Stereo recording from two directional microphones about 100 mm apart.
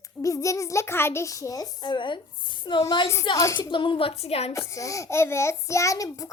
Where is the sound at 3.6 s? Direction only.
55° left (ahead or behind); by 4.5 s 90° left.